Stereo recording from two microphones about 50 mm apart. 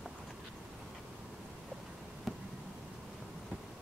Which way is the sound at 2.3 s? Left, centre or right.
Centre.